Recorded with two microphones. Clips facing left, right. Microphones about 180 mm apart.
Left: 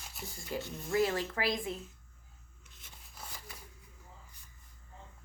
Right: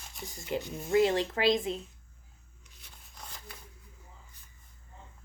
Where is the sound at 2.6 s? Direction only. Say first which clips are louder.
Even; 5° left (ahead or behind).